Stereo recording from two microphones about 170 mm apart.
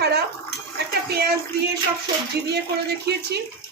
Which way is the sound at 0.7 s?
70° right (ahead or behind).